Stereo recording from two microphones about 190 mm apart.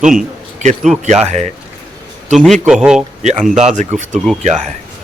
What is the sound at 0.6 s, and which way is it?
Speech, 40° right (ahead or behind).